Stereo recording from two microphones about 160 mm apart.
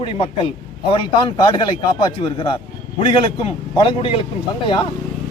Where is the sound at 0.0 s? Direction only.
35° left (ahead or behind).